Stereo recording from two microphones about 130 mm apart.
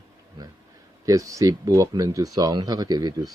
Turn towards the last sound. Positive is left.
turn(degrees=-30)  # may be behind; listen again after turning